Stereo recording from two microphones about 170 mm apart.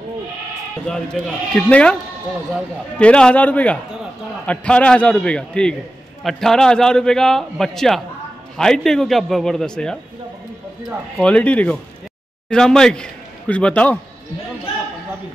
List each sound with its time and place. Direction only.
0.8 s a man's voice: 5° left (ahead or behind)
3.0 s a man's voice: 5° left (ahead or behind)
11.1 s a man's voice: 5° left (ahead or behind)